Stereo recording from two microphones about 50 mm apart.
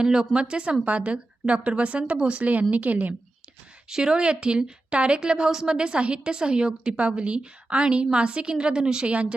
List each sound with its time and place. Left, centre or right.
0.0 s a woman's voice: centre; by 3.2 s right
3.8 s a woman's voice: centre
5.5 s a woman's voice: centre
5.7 s a woman's voice: centre